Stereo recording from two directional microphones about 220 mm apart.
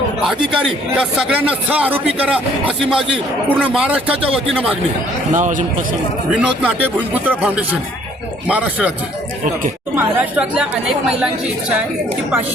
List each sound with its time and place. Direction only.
0.3 s a man's voice: centre (ahead or behind)
5.3 s a man's voice: 35° right (ahead or behind)
6.3 s a man's voice: 5° right (ahead or behind)
9.9 s speech: 5° right (ahead or behind)